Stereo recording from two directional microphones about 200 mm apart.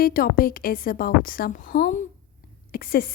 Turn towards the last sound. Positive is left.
turn(degrees=50)  # may be behind; listen again after turning